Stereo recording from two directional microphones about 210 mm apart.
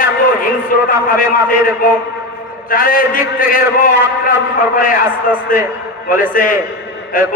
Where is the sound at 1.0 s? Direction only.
40° left (ahead or behind).